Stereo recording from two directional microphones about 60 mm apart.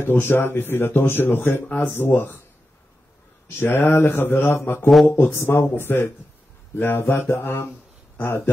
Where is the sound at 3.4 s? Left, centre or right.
Left.